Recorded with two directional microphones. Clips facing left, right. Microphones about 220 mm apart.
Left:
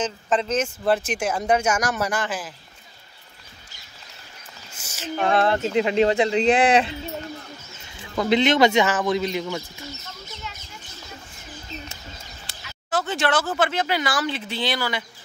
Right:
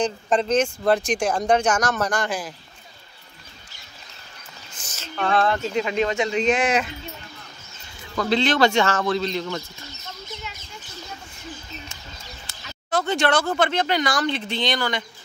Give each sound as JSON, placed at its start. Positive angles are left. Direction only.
{"t": 0.5, "sound": "speech", "side_deg": 5}
{"t": 4.7, "sound": "a sound", "side_deg": 10}
{"t": 5.3, "sound": "speech", "side_deg": 25}
{"t": 8.2, "sound": "speech", "side_deg": 20}
{"t": 12.9, "sound": "speech", "side_deg": 5}